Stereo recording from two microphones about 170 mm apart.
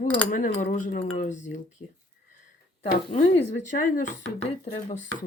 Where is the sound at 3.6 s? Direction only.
50° left (ahead or behind).